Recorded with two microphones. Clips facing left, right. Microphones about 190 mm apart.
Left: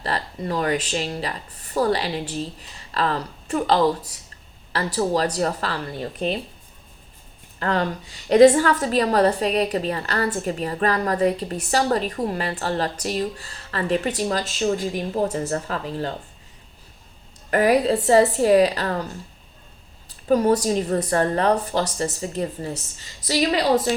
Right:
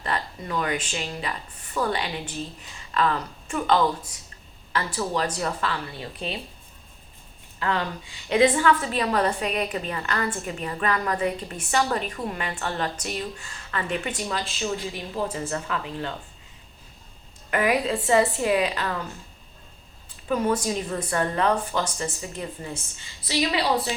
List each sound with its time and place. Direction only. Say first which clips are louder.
0.0 s a woman's voice: left 3 dB; 35° left (ahead or behind)
7.6 s a woman's voice: left 4 dB; 40° left (ahead or behind)
17.5 s a woman's voice: left 5 dB; 40° left (ahead or behind)
20.2 s a woman's voice: left 6 dB; 40° left (ahead or behind)